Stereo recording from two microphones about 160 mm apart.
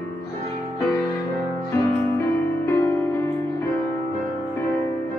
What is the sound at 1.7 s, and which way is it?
Music, 20° left (ahead or behind).